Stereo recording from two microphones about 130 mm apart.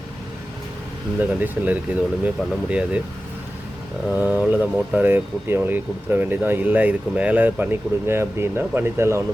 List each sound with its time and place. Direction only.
1.2 s speech: 15° right (ahead or behind)
4.1 s speech: 15° right (ahead or behind)